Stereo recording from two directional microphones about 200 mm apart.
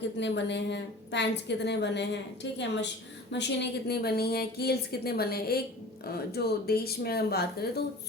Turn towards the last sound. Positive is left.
turn(degrees=50)  # may be behind; listen again after turning